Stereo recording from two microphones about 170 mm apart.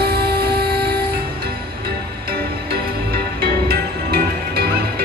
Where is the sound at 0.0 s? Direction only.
65° right (ahead or behind).